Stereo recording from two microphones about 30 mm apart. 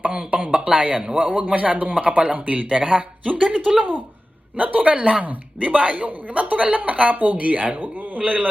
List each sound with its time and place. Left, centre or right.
0.0 s speech: right
0.5 s a woman's voice: right